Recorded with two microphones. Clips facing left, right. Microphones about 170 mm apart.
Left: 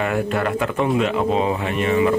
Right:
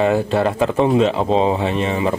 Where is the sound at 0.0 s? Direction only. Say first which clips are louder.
Right 5 dB; 30° right (ahead or behind).